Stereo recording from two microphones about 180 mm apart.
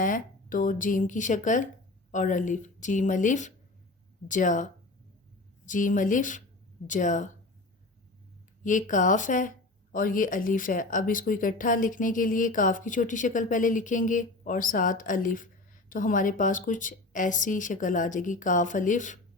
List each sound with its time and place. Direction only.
0.0 s speech: 50° left (ahead or behind)
8.6 s speech: 45° left (ahead or behind)